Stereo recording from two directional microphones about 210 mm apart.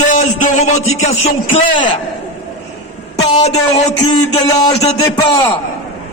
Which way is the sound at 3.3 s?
30° left (ahead or behind).